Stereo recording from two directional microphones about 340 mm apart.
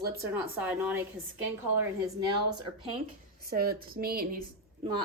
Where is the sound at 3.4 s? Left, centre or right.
Right.